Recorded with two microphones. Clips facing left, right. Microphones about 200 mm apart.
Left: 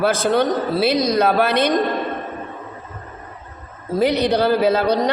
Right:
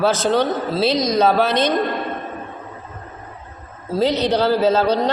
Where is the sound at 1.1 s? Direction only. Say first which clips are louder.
Right 1 dB; 55° left (ahead or behind).